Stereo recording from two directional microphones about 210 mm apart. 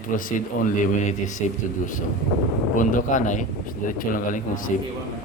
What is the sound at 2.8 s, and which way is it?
A man's voice, 40° left (ahead or behind).